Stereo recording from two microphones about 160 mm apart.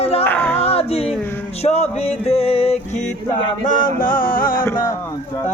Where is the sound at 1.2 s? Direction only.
10° left (ahead or behind).